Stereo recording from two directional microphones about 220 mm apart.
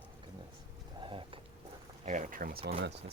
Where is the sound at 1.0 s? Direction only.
25° right (ahead or behind).